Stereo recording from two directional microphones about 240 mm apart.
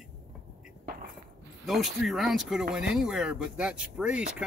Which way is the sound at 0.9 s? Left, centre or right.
Right.